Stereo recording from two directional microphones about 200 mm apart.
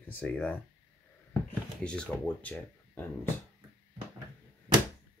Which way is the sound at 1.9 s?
5° left (ahead or behind).